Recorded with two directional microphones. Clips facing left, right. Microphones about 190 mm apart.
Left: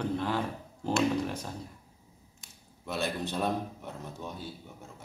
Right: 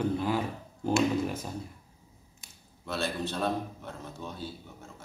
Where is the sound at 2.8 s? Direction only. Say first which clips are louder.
Even; 15° left (ahead or behind).